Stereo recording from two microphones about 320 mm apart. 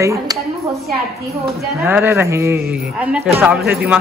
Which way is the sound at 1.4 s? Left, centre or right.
Centre.